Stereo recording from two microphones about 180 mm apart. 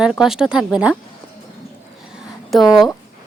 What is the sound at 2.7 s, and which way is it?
Speech, centre (ahead or behind).